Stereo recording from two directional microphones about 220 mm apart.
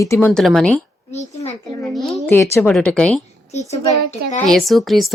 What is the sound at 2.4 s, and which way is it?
Speech, 10° left (ahead or behind).